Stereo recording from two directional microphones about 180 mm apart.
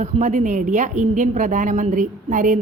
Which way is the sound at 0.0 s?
40° right (ahead or behind).